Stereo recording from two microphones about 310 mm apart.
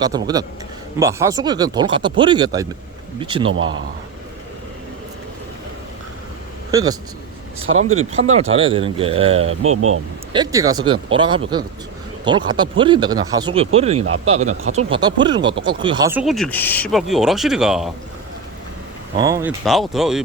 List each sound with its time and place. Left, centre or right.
0.0 s speech: centre
6.7 s a man's voice: centre
7.7 s speech: right
8.1 s speech: centre
9.5 s speech: right
10.3 s speech: centre
19.1 s speech: centre
19.6 s speech: centre